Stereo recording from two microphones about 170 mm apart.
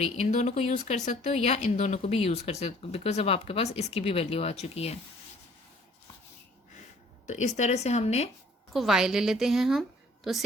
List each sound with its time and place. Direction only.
0.0 s speech: 40° left (ahead or behind)
7.3 s speech: 45° left (ahead or behind)
8.7 s a woman's voice: centre (ahead or behind)